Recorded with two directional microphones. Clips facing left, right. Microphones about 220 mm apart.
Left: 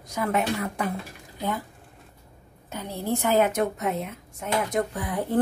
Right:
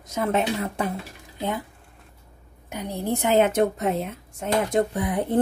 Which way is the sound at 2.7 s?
15° right (ahead or behind).